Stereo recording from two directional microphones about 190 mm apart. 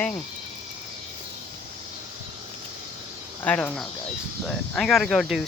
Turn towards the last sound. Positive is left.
turn(degrees=0)  # may be behind; listen again after turning